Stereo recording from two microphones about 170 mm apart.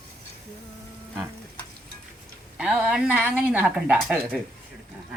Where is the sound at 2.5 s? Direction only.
5° right (ahead or behind).